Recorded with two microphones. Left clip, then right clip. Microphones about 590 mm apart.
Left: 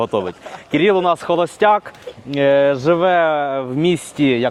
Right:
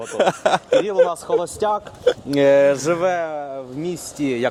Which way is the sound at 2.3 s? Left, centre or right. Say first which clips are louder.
Left 2 dB; centre.